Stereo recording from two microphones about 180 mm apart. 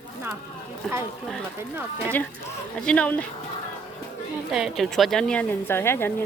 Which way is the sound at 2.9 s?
5° left (ahead or behind).